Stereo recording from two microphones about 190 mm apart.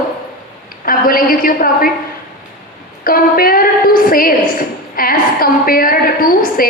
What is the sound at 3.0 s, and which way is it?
A woman's voice, 50° left (ahead or behind).